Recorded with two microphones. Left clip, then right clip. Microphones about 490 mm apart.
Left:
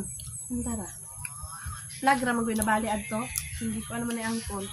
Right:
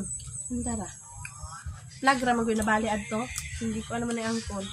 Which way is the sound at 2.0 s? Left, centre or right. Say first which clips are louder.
Right 1 dB; left.